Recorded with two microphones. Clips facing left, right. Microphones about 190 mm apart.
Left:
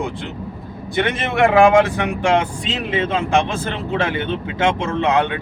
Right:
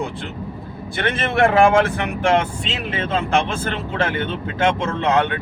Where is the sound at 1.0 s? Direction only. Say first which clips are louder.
Left 1 dB; 15° left (ahead or behind).